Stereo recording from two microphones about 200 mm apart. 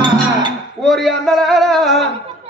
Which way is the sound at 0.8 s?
Centre (ahead or behind).